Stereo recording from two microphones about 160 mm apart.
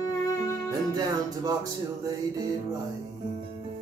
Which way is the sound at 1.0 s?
25° right (ahead or behind).